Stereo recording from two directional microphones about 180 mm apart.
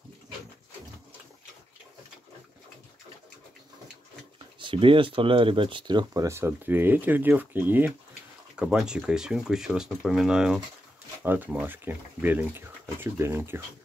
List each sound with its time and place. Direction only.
4.6 s speech: 30° right (ahead or behind); by 13.6 s 15° right (ahead or behind)